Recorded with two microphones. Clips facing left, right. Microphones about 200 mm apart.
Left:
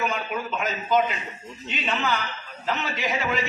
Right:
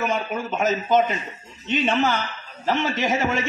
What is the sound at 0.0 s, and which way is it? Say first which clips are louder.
A man's voice: right 3 dB; 45° right (ahead or behind).